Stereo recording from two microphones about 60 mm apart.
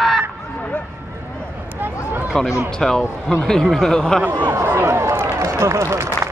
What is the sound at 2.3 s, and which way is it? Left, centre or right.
Speech, centre.